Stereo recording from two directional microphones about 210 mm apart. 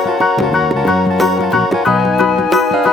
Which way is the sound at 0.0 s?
Centre (ahead or behind).